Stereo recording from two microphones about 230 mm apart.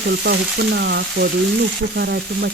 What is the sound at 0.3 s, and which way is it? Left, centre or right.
Frying, right.